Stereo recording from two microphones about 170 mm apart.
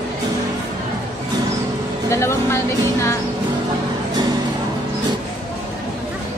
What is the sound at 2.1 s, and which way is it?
Music, 15° left (ahead or behind).